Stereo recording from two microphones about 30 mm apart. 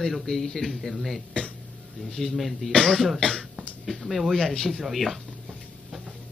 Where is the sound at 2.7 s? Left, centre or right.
Centre.